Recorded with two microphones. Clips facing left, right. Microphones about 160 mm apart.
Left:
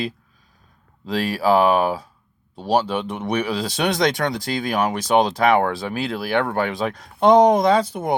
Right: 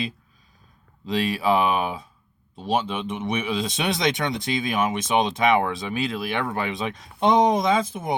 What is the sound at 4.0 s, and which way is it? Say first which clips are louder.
Speech: left 4 dB; 50° left (ahead or behind).